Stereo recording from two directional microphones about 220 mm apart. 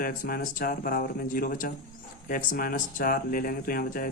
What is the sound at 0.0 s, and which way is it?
Speech, 40° left (ahead or behind).